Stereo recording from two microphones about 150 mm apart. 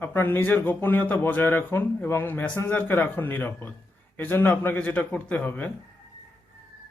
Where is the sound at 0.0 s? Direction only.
15° left (ahead or behind).